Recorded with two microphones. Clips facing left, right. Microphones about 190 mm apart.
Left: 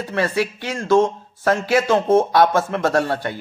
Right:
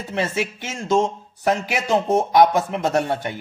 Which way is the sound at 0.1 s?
20° right (ahead or behind).